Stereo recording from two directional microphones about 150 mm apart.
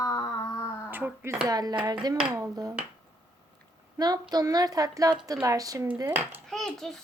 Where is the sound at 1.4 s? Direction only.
25° right (ahead or behind).